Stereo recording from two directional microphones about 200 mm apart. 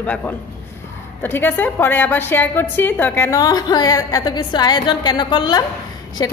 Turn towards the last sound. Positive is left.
turn(degrees=20)  # may be behind; listen again after turning